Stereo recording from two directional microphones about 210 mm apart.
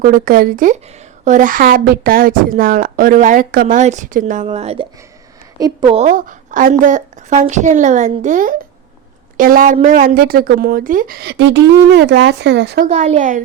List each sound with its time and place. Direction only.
0.0 s speech: 40° right (ahead or behind)
5.5 s a woman's voice: 20° right (ahead or behind)
6.0 s speech: 40° right (ahead or behind)
12.9 s speech: 35° right (ahead or behind)